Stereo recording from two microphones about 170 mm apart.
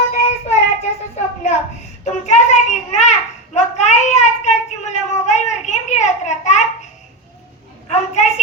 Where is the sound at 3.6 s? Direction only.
45° left (ahead or behind).